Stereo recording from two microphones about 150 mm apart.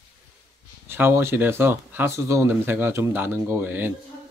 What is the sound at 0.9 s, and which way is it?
Speech, 15° right (ahead or behind).